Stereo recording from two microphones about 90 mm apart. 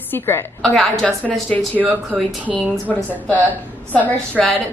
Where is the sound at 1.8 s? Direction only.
20° right (ahead or behind).